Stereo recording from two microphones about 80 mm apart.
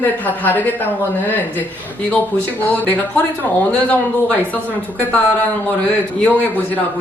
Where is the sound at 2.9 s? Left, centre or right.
Left.